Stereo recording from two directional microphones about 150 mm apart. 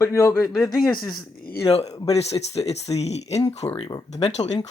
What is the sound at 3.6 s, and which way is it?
Speech, 25° left (ahead or behind).